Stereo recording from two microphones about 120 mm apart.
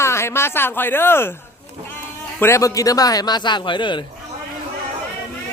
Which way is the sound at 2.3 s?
20° left (ahead or behind).